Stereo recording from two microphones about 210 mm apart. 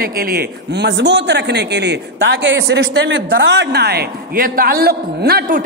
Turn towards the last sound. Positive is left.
turn(degrees=-45)  # may be behind; listen again after turning